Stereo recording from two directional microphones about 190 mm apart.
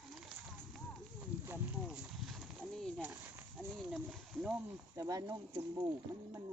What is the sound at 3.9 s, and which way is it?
Wild animals, centre (ahead or behind).